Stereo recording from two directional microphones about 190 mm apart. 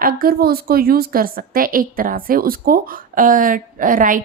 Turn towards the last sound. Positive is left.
turn(degrees=-45)  # may be behind; listen again after turning